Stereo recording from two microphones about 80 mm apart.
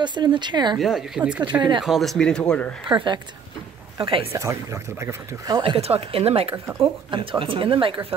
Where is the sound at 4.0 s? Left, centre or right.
Right.